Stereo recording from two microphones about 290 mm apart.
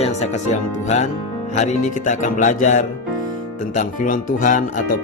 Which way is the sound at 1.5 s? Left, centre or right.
Left.